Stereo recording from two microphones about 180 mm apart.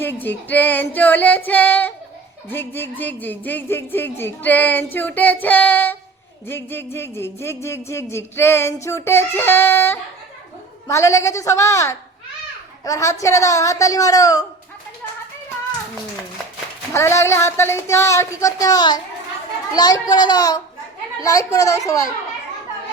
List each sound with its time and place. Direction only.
0.0 s music: 10° left (ahead or behind)
12.8 s a woman's voice: 20° left (ahead or behind)
16.9 s music: 15° left (ahead or behind)
19.7 s a woman's voice: 20° left (ahead or behind)
21.2 s music: 20° left (ahead or behind)